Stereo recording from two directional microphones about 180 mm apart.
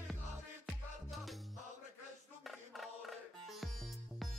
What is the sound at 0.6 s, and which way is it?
Music, centre (ahead or behind).